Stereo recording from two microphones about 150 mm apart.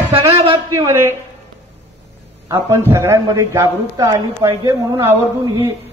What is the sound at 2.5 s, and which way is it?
A man's voice, 20° right (ahead or behind).